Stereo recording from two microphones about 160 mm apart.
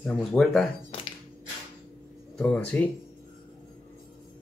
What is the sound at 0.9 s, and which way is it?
Music, 35° left (ahead or behind).